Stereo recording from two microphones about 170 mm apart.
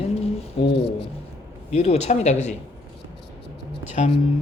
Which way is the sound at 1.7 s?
40° left (ahead or behind).